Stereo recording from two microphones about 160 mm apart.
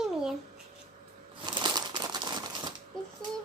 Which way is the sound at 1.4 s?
30° right (ahead or behind).